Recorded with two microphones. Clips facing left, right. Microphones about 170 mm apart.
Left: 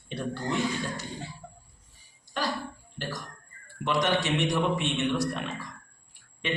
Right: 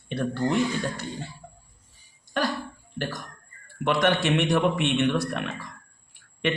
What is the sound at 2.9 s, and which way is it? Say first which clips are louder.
A man's voice: right 5 dB; 55° right (ahead or behind).